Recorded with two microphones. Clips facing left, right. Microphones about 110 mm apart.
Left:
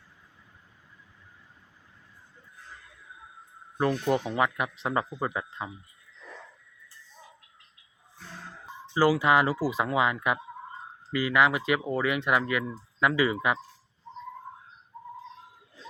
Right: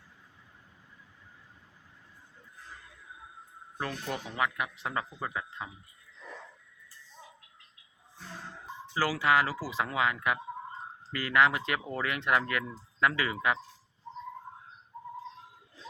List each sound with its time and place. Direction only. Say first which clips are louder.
3.8 s speech: left 10 dB; 25° left (ahead or behind)
9.0 s speech: left 5 dB; 20° left (ahead or behind)